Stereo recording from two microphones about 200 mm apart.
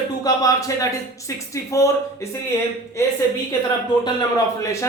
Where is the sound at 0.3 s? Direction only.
20° left (ahead or behind).